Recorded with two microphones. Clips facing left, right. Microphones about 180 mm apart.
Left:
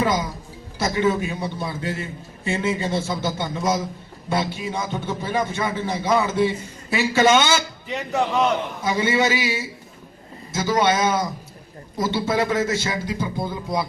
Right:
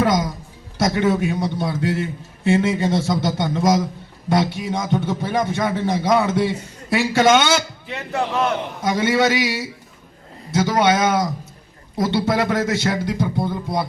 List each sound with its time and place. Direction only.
0.0 s a sound: 65° right (ahead or behind)
0.8 s a man's voice: 65° right (ahead or behind)
7.9 s a man's voice: 15° left (ahead or behind)
8.8 s a man's voice: 65° right (ahead or behind)